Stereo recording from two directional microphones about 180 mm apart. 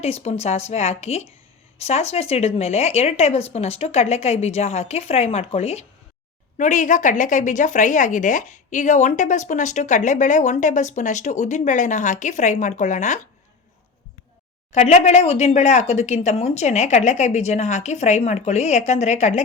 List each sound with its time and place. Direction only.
0.0 s a woman's voice: 35° left (ahead or behind)
14.7 s speech: 40° left (ahead or behind)